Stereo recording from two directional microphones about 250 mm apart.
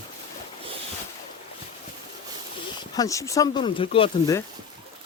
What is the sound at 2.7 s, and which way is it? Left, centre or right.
Speech, centre.